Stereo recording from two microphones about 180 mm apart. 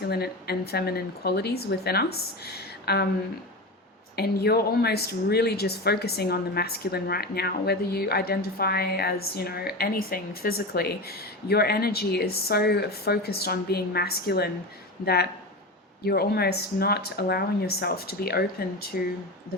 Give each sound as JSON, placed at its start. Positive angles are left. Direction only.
{"t": 0.0, "sound": "a woman's voice", "side_deg": 60}
{"t": 4.1, "sound": "a woman's voice", "side_deg": 60}